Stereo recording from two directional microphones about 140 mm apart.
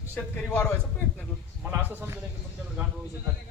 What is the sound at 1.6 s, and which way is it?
Speech, 15° right (ahead or behind).